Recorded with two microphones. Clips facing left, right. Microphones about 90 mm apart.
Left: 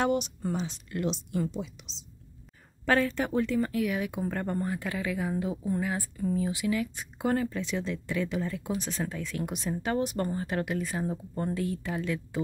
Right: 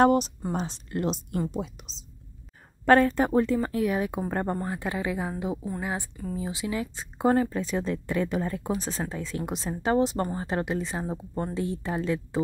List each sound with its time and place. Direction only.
0.0 s a woman's voice: 40° right (ahead or behind)